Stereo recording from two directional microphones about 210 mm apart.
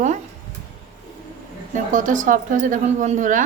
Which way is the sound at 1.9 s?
40° right (ahead or behind).